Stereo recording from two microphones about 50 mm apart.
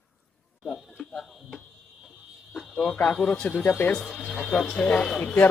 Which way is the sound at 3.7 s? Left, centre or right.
Left.